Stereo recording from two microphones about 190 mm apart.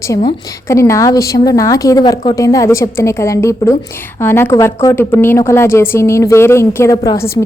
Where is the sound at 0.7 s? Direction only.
15° left (ahead or behind).